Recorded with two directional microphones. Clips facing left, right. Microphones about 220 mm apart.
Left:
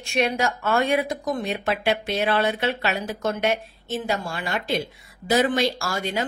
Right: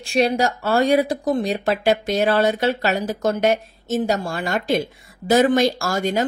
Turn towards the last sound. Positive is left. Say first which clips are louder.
# right 6 dB
turn(degrees=-45)  # may be behind; listen again after turning